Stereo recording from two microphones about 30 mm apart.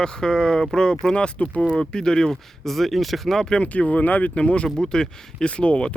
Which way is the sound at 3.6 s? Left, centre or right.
Left.